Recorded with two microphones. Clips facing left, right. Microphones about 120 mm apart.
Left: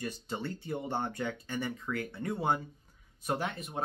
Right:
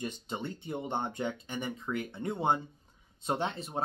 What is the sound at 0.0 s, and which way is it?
Speech, 20° right (ahead or behind).